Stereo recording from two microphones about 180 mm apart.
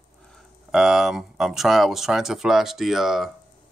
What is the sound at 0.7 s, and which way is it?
Speech, 5° right (ahead or behind).